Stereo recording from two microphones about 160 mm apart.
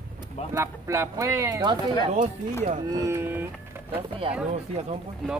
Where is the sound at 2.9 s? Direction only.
20° right (ahead or behind).